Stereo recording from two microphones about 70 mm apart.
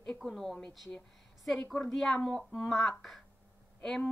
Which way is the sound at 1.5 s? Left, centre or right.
Centre.